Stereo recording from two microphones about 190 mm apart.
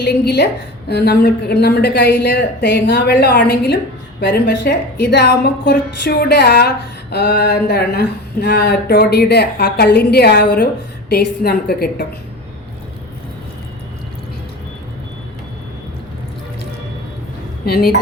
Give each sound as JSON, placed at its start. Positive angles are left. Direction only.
{"t": 0.0, "sound": "a woman's voice", "side_deg": 60}
{"t": 17.7, "sound": "a woman's voice", "side_deg": 55}